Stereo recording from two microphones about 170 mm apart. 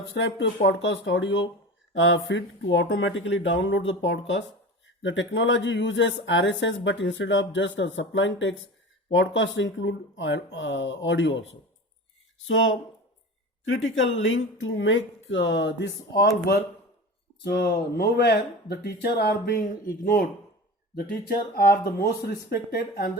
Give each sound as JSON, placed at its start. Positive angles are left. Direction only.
{"t": 0.2, "sound": "speech", "side_deg": 90}
{"t": 13.9, "sound": "speech", "side_deg": 90}
{"t": 20.9, "sound": "speech", "side_deg": 60}